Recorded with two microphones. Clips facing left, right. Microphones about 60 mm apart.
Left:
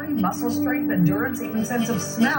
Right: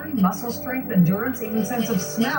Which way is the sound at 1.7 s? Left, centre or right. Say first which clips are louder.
Even; centre.